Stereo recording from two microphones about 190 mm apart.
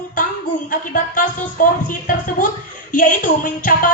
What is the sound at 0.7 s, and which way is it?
Speech, 45° left (ahead or behind).